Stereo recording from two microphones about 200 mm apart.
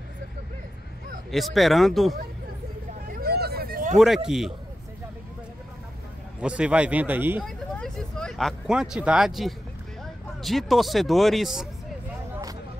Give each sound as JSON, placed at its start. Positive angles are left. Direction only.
{"t": 1.3, "sound": "speech", "side_deg": 0}
{"t": 3.1, "sound": "a sound", "side_deg": -50}
{"t": 4.3, "sound": "speech", "side_deg": -5}
{"t": 6.4, "sound": "a man's voice", "side_deg": -5}
{"t": 7.4, "sound": "speech", "side_deg": 5}